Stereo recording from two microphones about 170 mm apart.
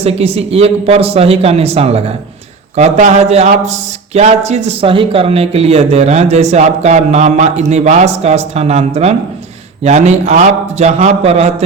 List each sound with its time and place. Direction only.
0.0 s speech: 35° right (ahead or behind)